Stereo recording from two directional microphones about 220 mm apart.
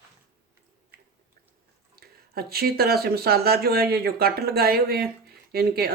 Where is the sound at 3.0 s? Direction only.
45° right (ahead or behind).